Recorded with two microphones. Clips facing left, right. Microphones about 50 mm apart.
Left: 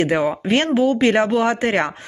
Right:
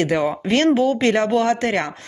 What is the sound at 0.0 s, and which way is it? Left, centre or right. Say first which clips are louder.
Speech: left 1 dB; centre.